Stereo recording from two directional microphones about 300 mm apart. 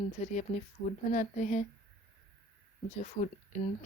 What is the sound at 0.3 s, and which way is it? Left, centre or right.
Speech, left.